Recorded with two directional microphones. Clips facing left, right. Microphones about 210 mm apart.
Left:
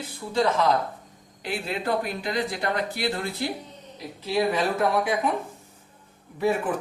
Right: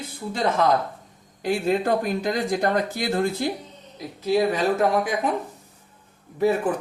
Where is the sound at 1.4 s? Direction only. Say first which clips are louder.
Right 7 dB; 45° right (ahead or behind).